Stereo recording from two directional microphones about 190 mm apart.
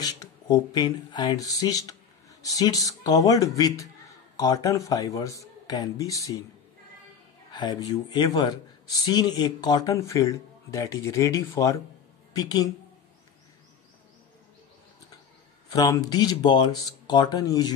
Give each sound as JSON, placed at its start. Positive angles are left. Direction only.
{"t": 0.0, "sound": "a man's voice", "side_deg": 20}
{"t": 7.5, "sound": "a man's voice", "side_deg": 20}
{"t": 15.7, "sound": "a man's voice", "side_deg": 20}